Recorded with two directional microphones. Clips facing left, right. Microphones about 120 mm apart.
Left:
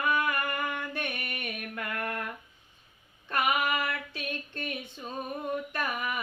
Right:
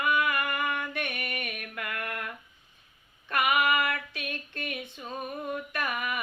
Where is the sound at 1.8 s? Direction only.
30° left (ahead or behind).